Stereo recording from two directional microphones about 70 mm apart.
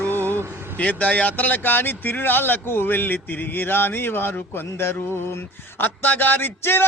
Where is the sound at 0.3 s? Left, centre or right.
Left.